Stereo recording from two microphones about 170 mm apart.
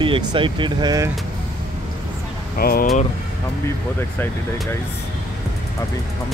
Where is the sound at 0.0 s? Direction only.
30° right (ahead or behind).